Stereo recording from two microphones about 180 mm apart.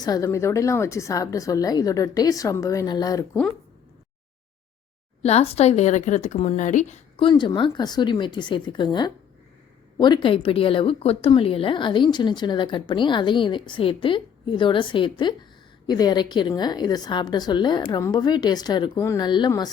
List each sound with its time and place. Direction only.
0.0 s a woman's voice: 20° left (ahead or behind)
5.2 s speech: 35° left (ahead or behind)
7.3 s a woman's voice: 25° left (ahead or behind)